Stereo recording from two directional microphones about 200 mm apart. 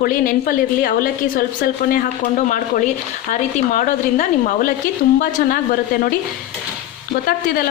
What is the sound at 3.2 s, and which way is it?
A woman's voice, 40° left (ahead or behind).